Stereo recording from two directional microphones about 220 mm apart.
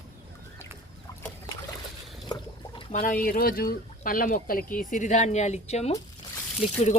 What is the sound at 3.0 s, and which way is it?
Speech, 40° left (ahead or behind).